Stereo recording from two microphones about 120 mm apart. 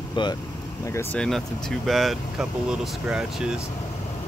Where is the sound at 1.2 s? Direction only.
5° left (ahead or behind).